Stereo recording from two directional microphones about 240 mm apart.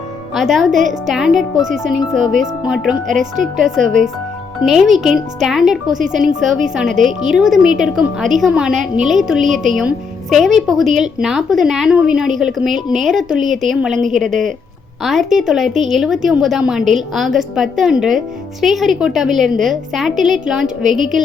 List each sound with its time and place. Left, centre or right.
0.3 s a woman's voice: centre
0.7 s a woman's voice: right
1.0 s a woman's voice: centre
15.0 s a woman's voice: centre